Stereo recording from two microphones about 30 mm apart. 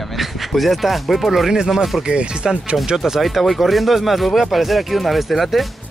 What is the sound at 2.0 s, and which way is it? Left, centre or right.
Speech, right.